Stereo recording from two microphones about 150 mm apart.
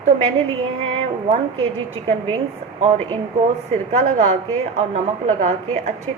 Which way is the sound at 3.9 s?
50° right (ahead or behind).